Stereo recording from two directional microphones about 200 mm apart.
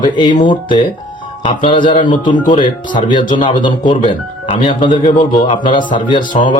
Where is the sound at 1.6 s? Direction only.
25° left (ahead or behind).